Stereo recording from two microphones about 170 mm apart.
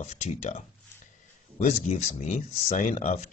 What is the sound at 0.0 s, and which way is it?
Speech, 45° left (ahead or behind).